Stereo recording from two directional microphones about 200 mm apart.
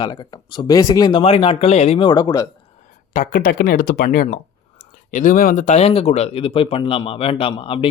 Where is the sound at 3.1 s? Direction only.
40° left (ahead or behind).